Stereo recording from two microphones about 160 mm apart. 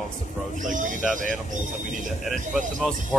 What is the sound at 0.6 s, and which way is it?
Speech, 55° right (ahead or behind).